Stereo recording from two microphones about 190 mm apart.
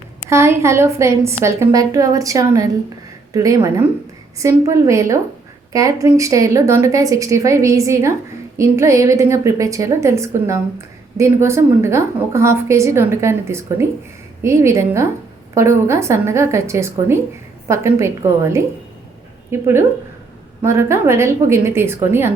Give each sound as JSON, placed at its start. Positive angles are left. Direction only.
{"t": 0.3, "sound": "a woman's voice", "side_deg": -15}